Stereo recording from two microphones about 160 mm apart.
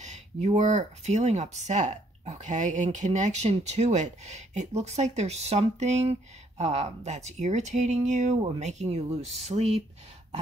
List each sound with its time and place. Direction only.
0.0 s speech: 45° right (ahead or behind)
9.5 s speech: 35° right (ahead or behind)